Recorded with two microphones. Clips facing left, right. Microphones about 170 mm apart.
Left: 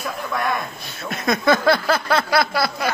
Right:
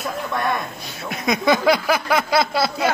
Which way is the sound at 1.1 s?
15° right (ahead or behind).